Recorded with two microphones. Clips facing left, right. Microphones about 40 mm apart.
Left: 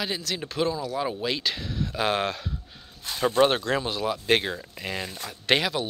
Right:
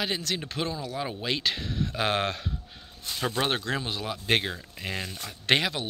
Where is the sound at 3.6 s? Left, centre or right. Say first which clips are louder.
Left 5 dB; centre.